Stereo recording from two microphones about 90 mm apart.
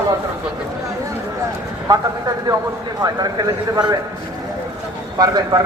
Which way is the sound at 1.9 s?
40° right (ahead or behind).